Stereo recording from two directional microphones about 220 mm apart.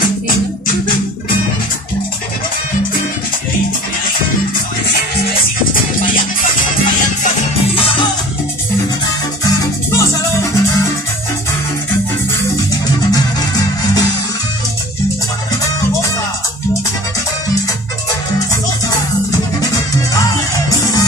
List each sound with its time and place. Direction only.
6.1 s music: 35° left (ahead or behind)
7.3 s music: 25° left (ahead or behind)
9.4 s music: 15° left (ahead or behind)
15.6 s music: 15° left (ahead or behind)
20.2 s music: 15° left (ahead or behind)